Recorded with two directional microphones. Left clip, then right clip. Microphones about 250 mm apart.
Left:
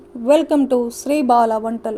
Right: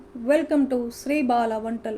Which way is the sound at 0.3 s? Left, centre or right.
Left.